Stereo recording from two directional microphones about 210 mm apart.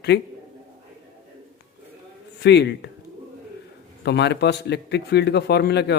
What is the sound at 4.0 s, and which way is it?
Speech, 55° left (ahead or behind).